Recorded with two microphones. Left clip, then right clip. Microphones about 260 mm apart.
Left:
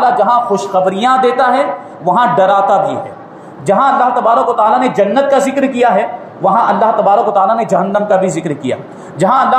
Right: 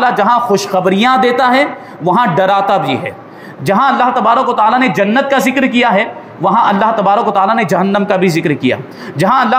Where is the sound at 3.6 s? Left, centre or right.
Right.